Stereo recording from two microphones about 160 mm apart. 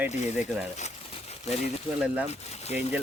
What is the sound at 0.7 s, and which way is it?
Crumpling, 45° left (ahead or behind).